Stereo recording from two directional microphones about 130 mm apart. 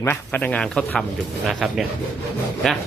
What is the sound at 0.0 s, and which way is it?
Speech, 15° left (ahead or behind).